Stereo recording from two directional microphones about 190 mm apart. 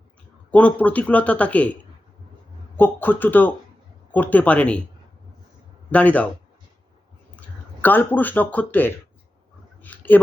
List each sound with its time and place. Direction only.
0.5 s speech: 5° left (ahead or behind)
2.7 s speech: 10° left (ahead or behind)
5.9 s speech: 10° left (ahead or behind)
7.3 s speech: 10° left (ahead or behind)
9.8 s a sound: 10° left (ahead or behind)